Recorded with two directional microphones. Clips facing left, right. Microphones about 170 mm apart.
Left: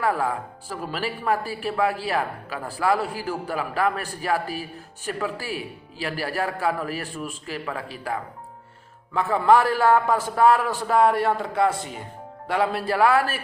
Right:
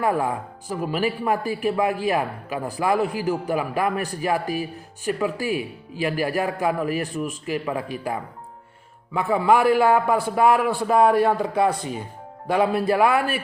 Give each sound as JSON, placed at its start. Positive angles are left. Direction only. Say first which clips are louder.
{"t": 0.0, "sound": "speech", "louder": "right 2 dB", "side_deg": -20}